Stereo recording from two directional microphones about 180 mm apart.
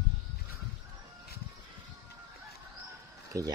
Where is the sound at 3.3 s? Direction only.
20° right (ahead or behind).